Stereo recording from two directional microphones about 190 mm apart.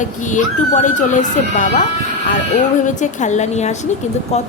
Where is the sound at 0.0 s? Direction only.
40° left (ahead or behind).